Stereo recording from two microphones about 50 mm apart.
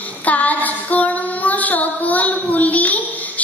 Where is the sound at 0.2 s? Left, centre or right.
Left.